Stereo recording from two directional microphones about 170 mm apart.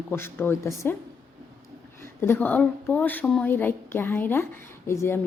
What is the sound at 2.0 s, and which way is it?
A woman's voice, 15° left (ahead or behind).